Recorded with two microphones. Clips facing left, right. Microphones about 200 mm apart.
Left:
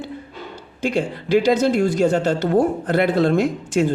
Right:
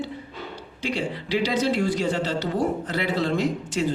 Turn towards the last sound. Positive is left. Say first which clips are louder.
# left 5 dB
turn(degrees=50)  # may be behind; listen again after turning